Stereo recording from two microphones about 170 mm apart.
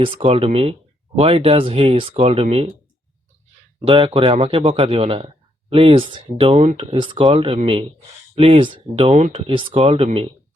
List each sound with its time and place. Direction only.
0.0 s speech: 35° right (ahead or behind)
3.8 s speech: 30° right (ahead or behind)